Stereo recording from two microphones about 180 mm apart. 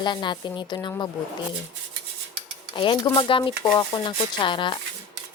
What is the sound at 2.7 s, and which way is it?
A woman's voice, 25° left (ahead or behind).